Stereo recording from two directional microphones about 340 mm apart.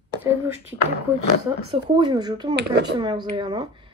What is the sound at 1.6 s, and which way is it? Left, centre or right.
Speech, centre.